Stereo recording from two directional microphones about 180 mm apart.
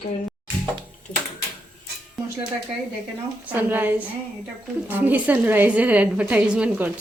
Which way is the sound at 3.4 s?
10° right (ahead or behind).